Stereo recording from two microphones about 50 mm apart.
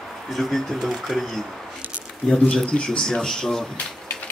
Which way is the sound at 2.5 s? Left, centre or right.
Centre.